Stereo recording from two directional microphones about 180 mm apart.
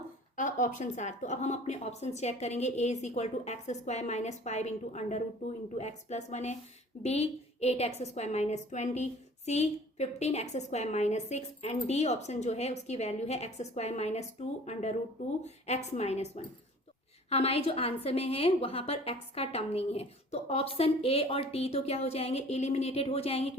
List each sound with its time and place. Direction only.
0.3 s a woman's voice: 45° left (ahead or behind)